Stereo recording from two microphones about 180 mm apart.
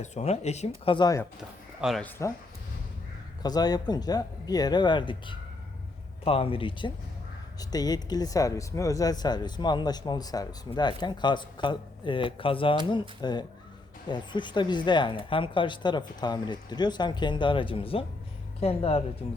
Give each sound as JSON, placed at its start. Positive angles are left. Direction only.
{"t": 0.0, "sound": "speech", "side_deg": 40}
{"t": 0.9, "sound": "speech", "side_deg": 25}
{"t": 1.4, "sound": "speech", "side_deg": 0}
{"t": 2.0, "sound": "speech", "side_deg": 15}
{"t": 3.4, "sound": "speech", "side_deg": 20}